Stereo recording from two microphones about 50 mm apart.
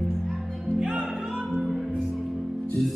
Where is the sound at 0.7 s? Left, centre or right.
Centre.